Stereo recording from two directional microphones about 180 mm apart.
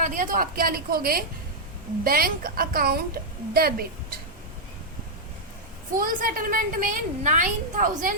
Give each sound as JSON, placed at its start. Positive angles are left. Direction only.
{"t": 0.0, "sound": "a woman's voice", "side_deg": -45}
{"t": 6.0, "sound": "a woman's voice", "side_deg": -50}